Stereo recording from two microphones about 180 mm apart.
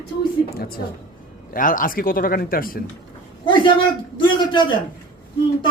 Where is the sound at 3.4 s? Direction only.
30° left (ahead or behind).